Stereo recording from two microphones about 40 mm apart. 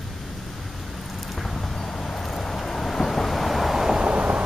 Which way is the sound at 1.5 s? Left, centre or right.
Centre.